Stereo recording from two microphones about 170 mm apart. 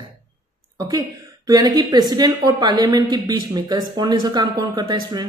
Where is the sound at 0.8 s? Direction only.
20° right (ahead or behind).